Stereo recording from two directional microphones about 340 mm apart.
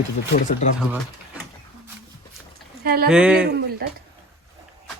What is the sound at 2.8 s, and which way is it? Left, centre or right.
Speech, right.